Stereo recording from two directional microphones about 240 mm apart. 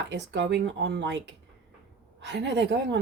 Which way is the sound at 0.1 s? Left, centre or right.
Right.